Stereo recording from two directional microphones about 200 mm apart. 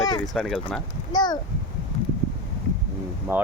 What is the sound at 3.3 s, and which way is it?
Speech, 10° right (ahead or behind).